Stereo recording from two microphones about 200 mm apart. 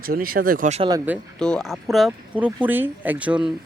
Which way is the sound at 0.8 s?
15° right (ahead or behind).